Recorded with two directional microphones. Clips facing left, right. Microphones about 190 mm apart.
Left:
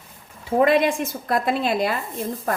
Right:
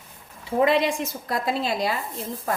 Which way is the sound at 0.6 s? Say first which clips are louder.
Left 2 dB; 55° left (ahead or behind).